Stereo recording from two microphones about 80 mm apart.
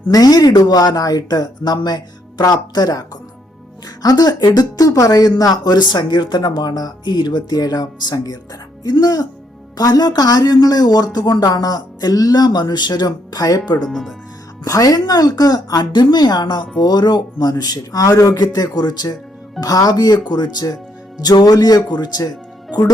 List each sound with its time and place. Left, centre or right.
0.1 s a woman's voice: left
4.0 s a woman's voice: left
5.4 s a woman's voice: left
13.8 s speech: centre
14.6 s a woman's voice: left
18.3 s speech: left